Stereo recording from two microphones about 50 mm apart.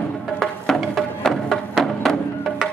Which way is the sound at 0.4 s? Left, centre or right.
Centre.